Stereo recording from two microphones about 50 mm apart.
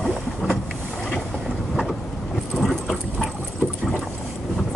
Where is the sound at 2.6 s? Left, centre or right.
Centre.